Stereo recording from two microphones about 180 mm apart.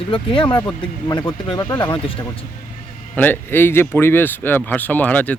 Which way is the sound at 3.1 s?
10° left (ahead or behind).